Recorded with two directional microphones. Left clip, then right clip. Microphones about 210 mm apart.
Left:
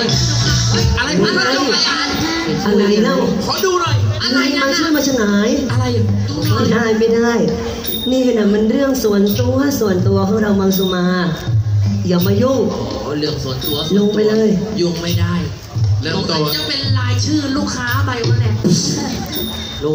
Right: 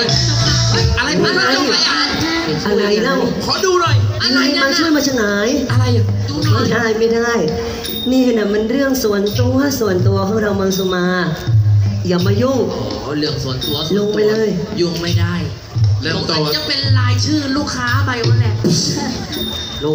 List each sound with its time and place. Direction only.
0.0 s music: 20° right (ahead or behind)
6.4 s speech: 20° right (ahead or behind)
13.7 s speech: 20° right (ahead or behind)